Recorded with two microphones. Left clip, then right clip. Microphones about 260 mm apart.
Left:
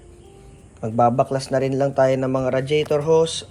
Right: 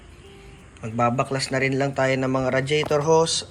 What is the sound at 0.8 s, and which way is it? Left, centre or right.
Speech, centre.